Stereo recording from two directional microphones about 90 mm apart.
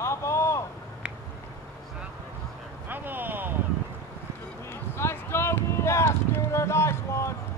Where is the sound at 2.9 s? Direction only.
20° right (ahead or behind).